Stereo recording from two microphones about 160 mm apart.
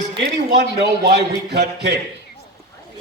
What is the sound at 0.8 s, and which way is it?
A man's voice, 90° right.